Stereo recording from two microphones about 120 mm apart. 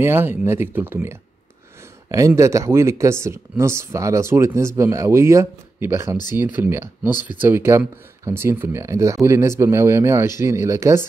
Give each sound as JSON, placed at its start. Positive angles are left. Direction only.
{"t": 0.0, "sound": "speech", "side_deg": -20}